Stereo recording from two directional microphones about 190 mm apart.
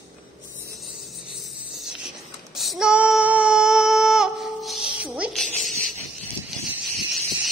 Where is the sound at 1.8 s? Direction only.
Centre (ahead or behind).